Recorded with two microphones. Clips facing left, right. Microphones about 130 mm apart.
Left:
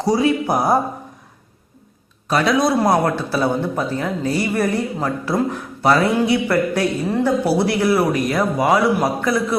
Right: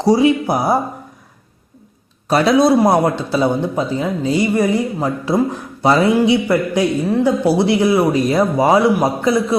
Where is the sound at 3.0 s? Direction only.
20° right (ahead or behind).